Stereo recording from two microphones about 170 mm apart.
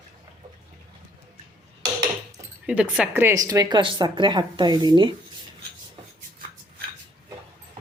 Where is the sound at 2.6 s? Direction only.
5° right (ahead or behind); by 5.2 s 25° right (ahead or behind).